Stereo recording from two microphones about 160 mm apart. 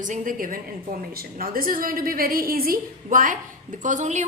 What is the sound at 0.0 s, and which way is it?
A woman's voice, 55° right (ahead or behind).